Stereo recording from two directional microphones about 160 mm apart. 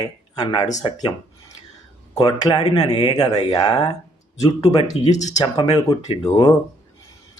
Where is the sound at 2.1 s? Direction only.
25° left (ahead or behind).